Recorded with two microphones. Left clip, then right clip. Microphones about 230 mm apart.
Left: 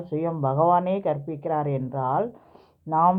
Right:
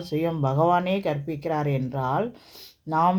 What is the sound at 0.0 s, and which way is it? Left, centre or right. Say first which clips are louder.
Speech: even; right.